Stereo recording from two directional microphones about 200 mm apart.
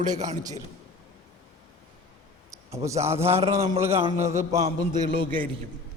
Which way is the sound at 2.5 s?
15° right (ahead or behind).